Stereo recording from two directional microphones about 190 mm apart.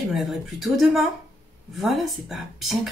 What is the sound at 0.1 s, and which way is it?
Speech, centre (ahead or behind).